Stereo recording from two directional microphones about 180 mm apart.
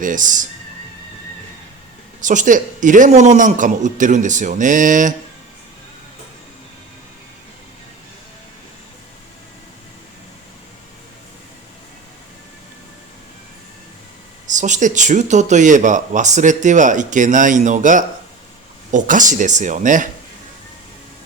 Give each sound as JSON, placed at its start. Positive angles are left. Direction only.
{"t": 0.0, "sound": "speech", "side_deg": -45}
{"t": 2.2, "sound": "speech", "side_deg": -45}
{"t": 14.4, "sound": "speech", "side_deg": -45}